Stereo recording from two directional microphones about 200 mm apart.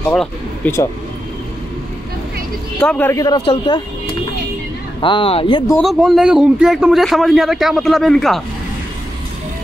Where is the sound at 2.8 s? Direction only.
5° left (ahead or behind).